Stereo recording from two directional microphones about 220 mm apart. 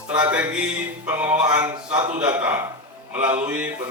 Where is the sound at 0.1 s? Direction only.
5° right (ahead or behind).